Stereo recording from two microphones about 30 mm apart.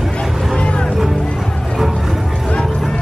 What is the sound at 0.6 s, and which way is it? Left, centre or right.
Music, left.